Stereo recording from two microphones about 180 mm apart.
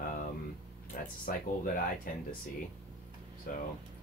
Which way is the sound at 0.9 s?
50° left (ahead or behind).